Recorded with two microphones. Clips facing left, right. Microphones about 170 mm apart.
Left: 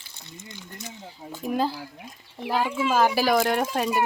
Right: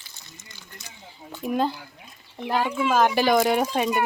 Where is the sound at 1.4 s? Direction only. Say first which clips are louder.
Right 1 dB; centre (ahead or behind).